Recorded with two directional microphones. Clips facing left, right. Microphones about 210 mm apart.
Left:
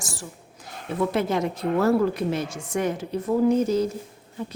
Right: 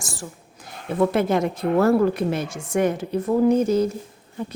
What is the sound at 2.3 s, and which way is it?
Speech, 55° right (ahead or behind).